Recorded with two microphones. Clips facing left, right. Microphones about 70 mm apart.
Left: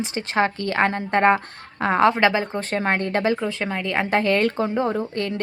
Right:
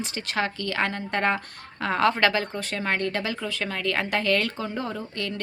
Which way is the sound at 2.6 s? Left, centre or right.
Left.